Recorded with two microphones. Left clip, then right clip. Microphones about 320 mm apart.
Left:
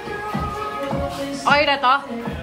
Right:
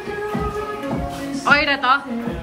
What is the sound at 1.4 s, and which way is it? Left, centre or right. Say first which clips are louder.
Music: even; centre.